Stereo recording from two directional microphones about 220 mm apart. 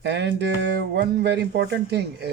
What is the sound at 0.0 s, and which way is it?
Speech, 50° right (ahead or behind).